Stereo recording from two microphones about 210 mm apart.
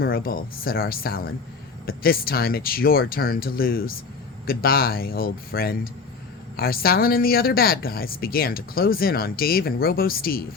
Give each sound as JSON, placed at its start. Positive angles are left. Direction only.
{"t": 0.0, "sound": "speech", "side_deg": 45}